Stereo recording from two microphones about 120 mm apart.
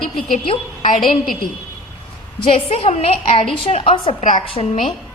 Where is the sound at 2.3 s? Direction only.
50° left (ahead or behind).